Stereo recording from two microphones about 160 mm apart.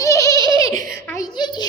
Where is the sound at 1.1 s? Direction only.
25° left (ahead or behind).